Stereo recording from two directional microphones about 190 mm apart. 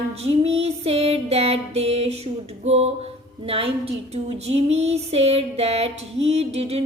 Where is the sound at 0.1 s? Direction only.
35° right (ahead or behind).